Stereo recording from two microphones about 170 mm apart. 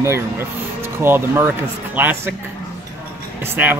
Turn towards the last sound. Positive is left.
turn(degrees=-10)  # may be behind; listen again after turning